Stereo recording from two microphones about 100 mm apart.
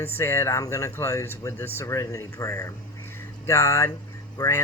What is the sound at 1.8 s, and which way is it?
A man's voice, 30° left (ahead or behind).